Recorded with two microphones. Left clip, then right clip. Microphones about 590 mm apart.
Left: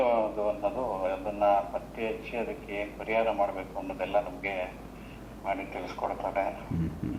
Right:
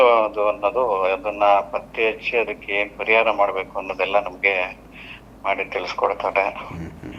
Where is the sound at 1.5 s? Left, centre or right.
Right.